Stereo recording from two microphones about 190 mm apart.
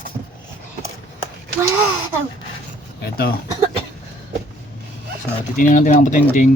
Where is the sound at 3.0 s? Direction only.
55° left (ahead or behind).